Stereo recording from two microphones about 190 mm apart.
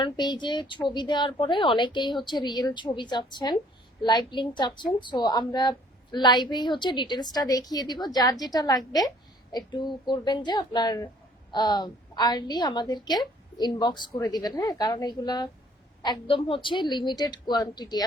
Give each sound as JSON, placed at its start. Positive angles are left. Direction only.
{"t": 0.0, "sound": "a woman's voice", "side_deg": 25}